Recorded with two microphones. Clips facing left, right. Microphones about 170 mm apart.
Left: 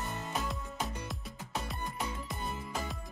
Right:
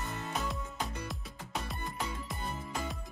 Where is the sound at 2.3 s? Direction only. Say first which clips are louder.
Left 1 dB; centre (ahead or behind).